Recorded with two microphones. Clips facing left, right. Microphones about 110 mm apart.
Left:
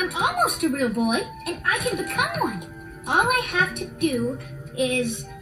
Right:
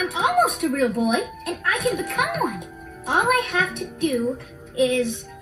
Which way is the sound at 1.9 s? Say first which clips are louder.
Right 1 dB; 30° right (ahead or behind).